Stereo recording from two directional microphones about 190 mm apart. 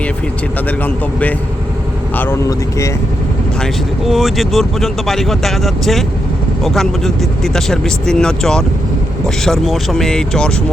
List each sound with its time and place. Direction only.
2.1 s speech: 10° left (ahead or behind)
3.6 s speech: centre (ahead or behind)